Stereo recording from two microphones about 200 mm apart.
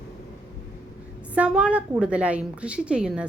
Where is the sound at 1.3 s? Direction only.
5° right (ahead or behind).